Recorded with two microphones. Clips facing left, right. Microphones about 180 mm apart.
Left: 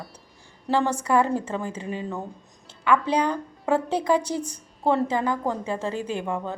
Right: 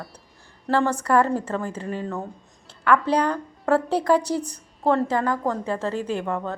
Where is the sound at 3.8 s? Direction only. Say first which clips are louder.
Right 2 dB; 35° right (ahead or behind).